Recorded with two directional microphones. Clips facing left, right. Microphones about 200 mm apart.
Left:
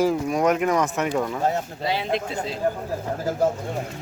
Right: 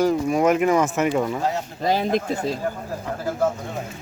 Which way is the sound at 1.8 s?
45° right (ahead or behind).